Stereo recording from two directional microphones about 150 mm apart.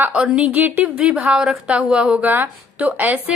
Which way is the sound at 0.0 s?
10° right (ahead or behind).